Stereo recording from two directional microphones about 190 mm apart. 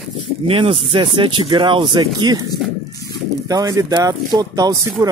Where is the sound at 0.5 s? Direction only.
25° right (ahead or behind).